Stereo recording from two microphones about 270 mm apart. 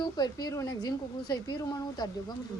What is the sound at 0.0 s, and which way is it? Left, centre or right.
Speech, centre.